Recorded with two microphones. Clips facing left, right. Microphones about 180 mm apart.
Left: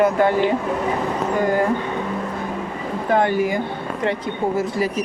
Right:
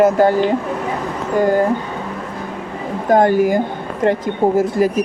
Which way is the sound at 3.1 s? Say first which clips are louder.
Right 6 dB; 40° right (ahead or behind).